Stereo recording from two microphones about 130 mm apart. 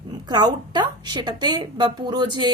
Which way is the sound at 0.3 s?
35° right (ahead or behind).